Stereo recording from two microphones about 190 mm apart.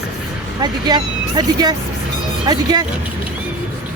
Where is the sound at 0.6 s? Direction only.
20° right (ahead or behind).